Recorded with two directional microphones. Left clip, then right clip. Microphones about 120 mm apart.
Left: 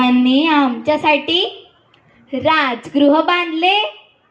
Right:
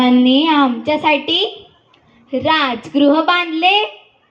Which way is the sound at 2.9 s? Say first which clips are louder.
Even; 45° right (ahead or behind).